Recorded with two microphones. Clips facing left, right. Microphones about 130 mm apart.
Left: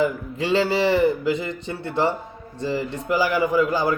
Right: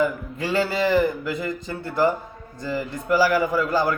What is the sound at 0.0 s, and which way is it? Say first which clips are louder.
Speech: left 1 dB; 25° left (ahead or behind).